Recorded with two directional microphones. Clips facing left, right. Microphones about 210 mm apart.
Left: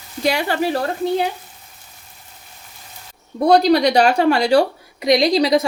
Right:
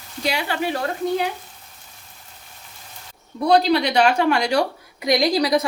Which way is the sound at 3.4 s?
45° left (ahead or behind).